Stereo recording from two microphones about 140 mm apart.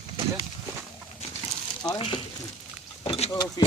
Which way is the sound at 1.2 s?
50° left (ahead or behind).